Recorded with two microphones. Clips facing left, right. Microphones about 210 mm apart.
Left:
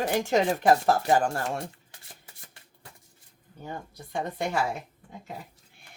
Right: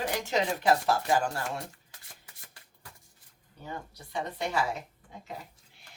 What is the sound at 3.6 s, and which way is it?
Speech, 50° left (ahead or behind).